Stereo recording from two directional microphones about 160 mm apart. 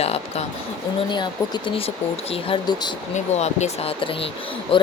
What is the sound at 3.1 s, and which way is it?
Speech, 45° left (ahead or behind).